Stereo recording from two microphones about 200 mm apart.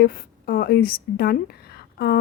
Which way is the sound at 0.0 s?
50° left (ahead or behind).